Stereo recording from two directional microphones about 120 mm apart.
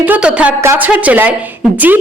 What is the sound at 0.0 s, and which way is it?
Speech, 10° right (ahead or behind).